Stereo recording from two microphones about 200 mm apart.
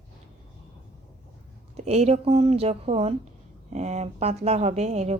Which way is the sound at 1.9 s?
30° right (ahead or behind).